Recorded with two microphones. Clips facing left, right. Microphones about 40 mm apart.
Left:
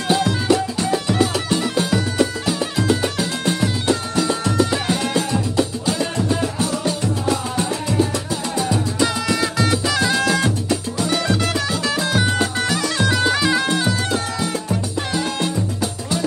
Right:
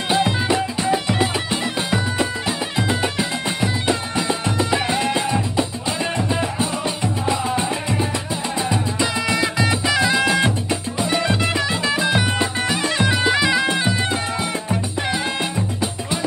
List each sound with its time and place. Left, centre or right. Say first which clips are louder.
0.1 s music: left 1 dB; right